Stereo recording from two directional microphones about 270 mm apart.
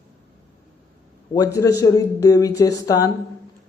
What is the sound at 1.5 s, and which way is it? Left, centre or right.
A man's voice, centre.